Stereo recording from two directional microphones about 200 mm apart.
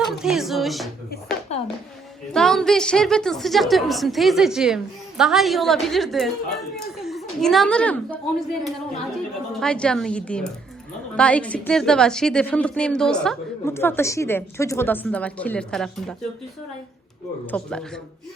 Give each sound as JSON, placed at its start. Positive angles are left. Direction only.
{"t": 0.0, "sound": "a woman's voice", "side_deg": 0}
{"t": 1.5, "sound": "a sound", "side_deg": 35}
{"t": 2.3, "sound": "a woman's voice", "side_deg": 0}
{"t": 17.4, "sound": "a woman's voice", "side_deg": 5}